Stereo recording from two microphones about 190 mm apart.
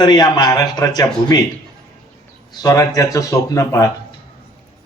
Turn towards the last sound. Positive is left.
turn(degrees=15)  # may be behind; listen again after turning